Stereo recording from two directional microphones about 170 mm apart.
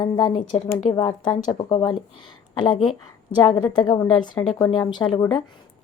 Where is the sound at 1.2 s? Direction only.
25° left (ahead or behind).